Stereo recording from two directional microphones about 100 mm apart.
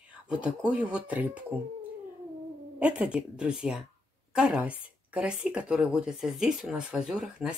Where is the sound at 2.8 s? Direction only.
10° right (ahead or behind).